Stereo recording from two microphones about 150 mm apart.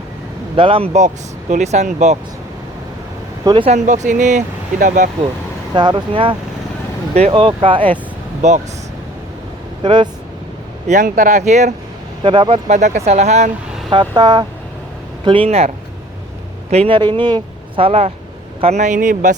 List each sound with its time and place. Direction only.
0.5 s speech: 35° right (ahead or behind)
3.4 s speech: 35° right (ahead or behind)
3.8 s speech: 55° right (ahead or behind)
5.7 s speech: 30° right (ahead or behind)
8.4 s speech: 50° right (ahead or behind)
9.8 s speech: 30° right (ahead or behind)
10.8 s speech: 60° right (ahead or behind)
12.2 s speech: 35° right (ahead or behind)
12.6 s speech: 55° right (ahead or behind)
13.9 s speech: 30° right (ahead or behind)
16.7 s speech: 35° right (ahead or behind); by 19.4 s 60° right (ahead or behind)